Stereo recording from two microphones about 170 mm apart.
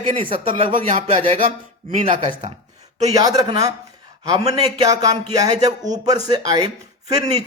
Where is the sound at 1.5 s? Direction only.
45° right (ahead or behind).